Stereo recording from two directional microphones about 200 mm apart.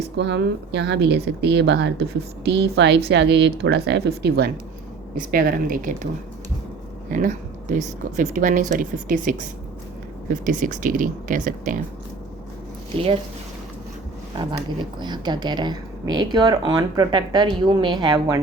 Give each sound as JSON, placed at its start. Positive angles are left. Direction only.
{"t": 0.2, "sound": "speech", "side_deg": -60}
{"t": 7.1, "sound": "speech", "side_deg": -40}
{"t": 10.4, "sound": "speech", "side_deg": -40}
{"t": 12.9, "sound": "speech", "side_deg": -30}
{"t": 14.9, "sound": "speech", "side_deg": -20}